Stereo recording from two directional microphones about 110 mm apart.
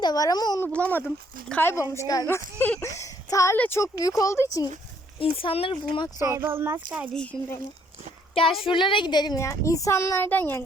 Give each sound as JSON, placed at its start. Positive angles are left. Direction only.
{"t": 0.0, "sound": "speech", "side_deg": 35}
{"t": 0.6, "sound": "speech", "side_deg": 15}
{"t": 1.9, "sound": "speech", "side_deg": 30}
{"t": 2.2, "sound": "speech", "side_deg": 20}
{"t": 2.8, "sound": "speech", "side_deg": 30}
{"t": 3.6, "sound": "speech", "side_deg": 20}
{"t": 5.2, "sound": "speech", "side_deg": 55}
{"t": 6.1, "sound": "speech", "side_deg": -25}
{"t": 7.1, "sound": "speech", "side_deg": 10}
{"t": 8.6, "sound": "a woman's voice", "side_deg": 50}
{"t": 9.4, "sound": "speech", "side_deg": 30}